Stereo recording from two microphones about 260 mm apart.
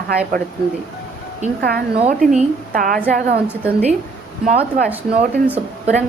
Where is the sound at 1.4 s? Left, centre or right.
Right.